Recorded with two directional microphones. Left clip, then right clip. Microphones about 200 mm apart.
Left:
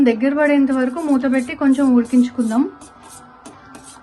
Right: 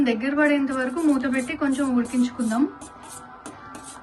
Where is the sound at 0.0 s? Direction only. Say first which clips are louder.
Left 6 dB; 30° left (ahead or behind).